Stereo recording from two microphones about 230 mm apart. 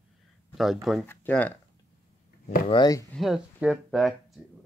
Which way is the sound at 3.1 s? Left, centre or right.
Centre.